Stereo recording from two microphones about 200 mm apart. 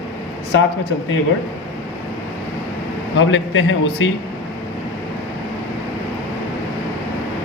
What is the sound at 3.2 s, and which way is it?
Speech, 70° left (ahead or behind).